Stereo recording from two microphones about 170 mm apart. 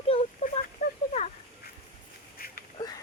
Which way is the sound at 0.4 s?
55° left (ahead or behind).